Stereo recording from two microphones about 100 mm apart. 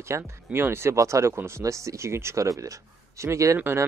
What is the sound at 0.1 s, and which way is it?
Speech, 20° right (ahead or behind).